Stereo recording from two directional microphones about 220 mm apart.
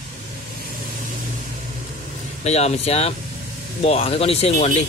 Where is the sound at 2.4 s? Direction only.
30° left (ahead or behind).